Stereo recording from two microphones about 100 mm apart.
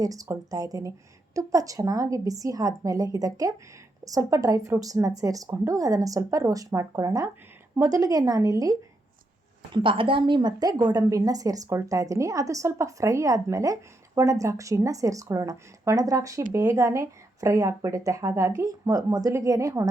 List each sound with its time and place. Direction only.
0.0 s speech: 35° right (ahead or behind)
9.7 s speech: 60° right (ahead or behind); by 19.9 s 30° right (ahead or behind)